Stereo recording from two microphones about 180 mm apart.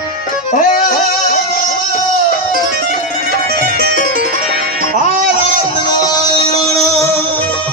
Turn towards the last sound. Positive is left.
turn(degrees=15)  # may be behind; listen again after turning